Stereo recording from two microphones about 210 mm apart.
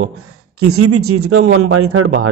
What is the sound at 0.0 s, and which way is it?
A man's voice, 90° right.